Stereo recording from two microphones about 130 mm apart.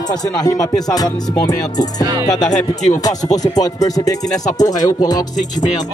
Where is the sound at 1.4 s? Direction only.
30° left (ahead or behind).